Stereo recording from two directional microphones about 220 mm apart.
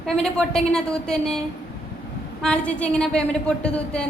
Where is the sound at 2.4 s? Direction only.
5° left (ahead or behind).